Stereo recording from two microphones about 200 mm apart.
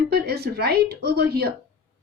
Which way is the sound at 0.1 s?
50° right (ahead or behind).